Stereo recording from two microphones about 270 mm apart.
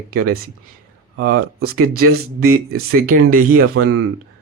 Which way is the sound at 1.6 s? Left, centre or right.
Right.